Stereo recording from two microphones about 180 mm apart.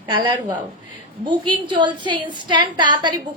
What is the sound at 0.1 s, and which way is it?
A woman's voice, 25° right (ahead or behind).